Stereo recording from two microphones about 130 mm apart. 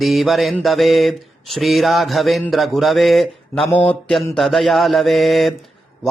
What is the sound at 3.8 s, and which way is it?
Mantra, 5° left (ahead or behind).